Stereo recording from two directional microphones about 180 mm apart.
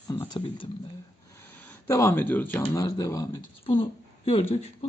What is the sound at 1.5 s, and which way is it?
Speech, 10° left (ahead or behind).